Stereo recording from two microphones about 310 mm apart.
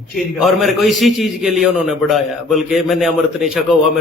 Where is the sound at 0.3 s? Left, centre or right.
Centre.